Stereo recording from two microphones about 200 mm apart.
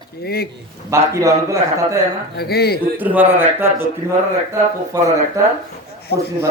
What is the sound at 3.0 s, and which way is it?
Speech, 10° right (ahead or behind).